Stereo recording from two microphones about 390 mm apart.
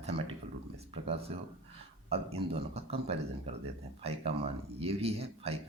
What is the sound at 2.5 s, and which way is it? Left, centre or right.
Speech, centre.